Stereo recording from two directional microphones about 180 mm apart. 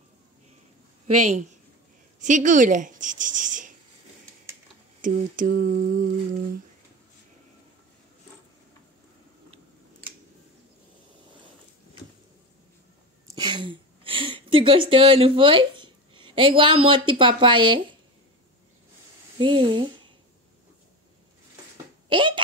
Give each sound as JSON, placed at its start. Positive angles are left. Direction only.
{"t": 1.0, "sound": "a woman's voice", "side_deg": -40}
{"t": 5.0, "sound": "a sound", "side_deg": -45}
{"t": 13.3, "sound": "a woman's voice", "side_deg": -25}
{"t": 19.3, "sound": "speech", "side_deg": -30}
{"t": 22.1, "sound": "speech", "side_deg": -25}